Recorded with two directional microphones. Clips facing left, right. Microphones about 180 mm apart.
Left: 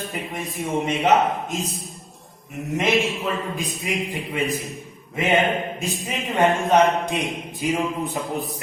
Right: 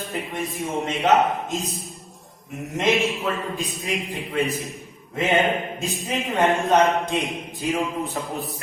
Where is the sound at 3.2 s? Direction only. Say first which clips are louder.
Even; 15° left (ahead or behind).